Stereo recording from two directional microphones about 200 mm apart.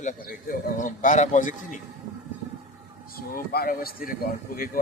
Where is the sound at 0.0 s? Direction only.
40° left (ahead or behind).